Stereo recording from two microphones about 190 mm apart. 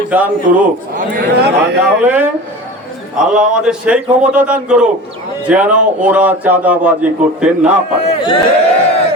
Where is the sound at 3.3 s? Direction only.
5° right (ahead or behind).